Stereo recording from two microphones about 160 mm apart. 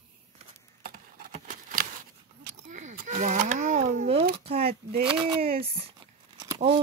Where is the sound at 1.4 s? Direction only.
60° right (ahead or behind).